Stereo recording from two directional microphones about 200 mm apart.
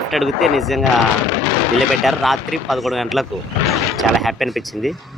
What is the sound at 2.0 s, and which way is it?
Speech, centre (ahead or behind).